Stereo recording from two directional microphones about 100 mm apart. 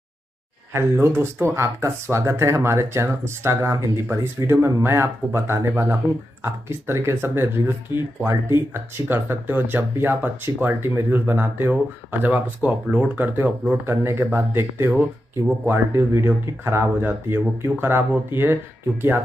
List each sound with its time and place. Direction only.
0.7 s speech: 25° right (ahead or behind)